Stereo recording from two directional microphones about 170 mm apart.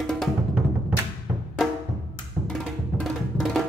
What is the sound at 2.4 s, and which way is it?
Music, centre (ahead or behind).